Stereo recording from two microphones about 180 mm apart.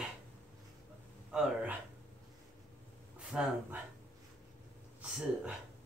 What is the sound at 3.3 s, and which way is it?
Speech, 5° right (ahead or behind).